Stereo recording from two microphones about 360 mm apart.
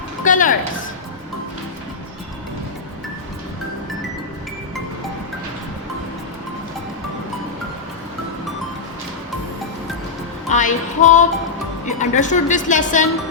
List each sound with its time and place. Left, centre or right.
0.3 s music: left
10.5 s music: left
11.9 s a woman's voice: centre